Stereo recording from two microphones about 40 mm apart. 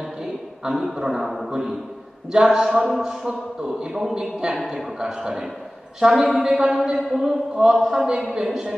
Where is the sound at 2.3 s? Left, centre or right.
Centre.